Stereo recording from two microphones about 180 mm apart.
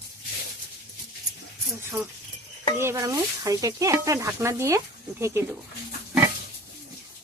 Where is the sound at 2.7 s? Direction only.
15° right (ahead or behind).